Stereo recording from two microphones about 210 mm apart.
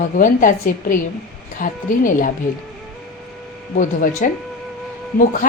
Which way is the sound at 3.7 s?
40° left (ahead or behind).